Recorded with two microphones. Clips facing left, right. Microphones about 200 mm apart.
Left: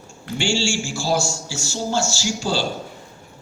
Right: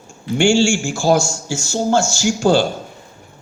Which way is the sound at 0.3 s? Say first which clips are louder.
Right 8 dB; 50° right (ahead or behind).